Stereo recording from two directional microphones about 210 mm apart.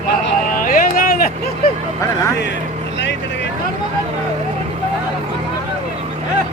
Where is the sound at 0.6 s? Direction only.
40° left (ahead or behind).